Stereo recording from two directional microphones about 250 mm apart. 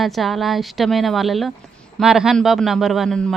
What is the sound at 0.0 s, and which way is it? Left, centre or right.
Speech, centre.